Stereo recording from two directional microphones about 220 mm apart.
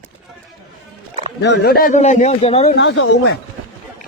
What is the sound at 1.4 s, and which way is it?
Speech, 50° left (ahead or behind).